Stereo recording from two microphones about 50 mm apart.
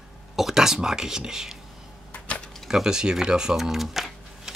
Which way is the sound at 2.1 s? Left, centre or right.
Left.